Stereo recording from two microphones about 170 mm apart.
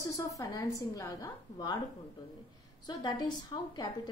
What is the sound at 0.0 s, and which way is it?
A woman's voice, 20° left (ahead or behind).